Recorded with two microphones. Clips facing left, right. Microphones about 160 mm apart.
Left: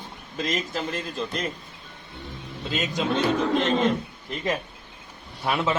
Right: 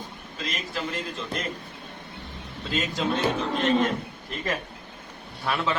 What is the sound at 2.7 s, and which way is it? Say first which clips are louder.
Speech: left 1 dB; 20° left (ahead or behind).